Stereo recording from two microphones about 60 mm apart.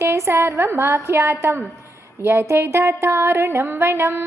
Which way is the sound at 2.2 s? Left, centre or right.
Right.